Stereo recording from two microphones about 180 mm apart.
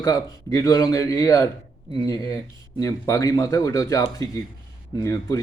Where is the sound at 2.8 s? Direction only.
20° left (ahead or behind).